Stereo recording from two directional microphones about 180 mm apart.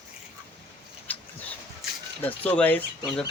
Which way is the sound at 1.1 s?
10° left (ahead or behind).